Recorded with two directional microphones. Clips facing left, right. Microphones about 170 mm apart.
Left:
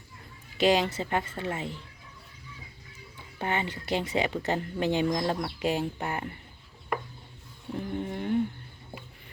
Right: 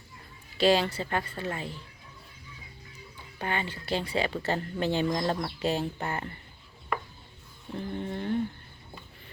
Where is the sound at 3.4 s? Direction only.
20° left (ahead or behind).